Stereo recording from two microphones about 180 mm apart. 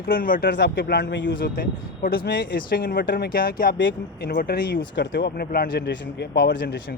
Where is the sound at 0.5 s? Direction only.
70° left (ahead or behind).